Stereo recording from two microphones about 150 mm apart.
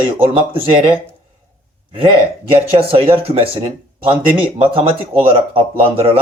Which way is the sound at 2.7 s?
40° right (ahead or behind).